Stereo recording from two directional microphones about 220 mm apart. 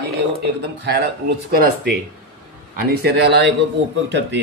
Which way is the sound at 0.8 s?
45° right (ahead or behind).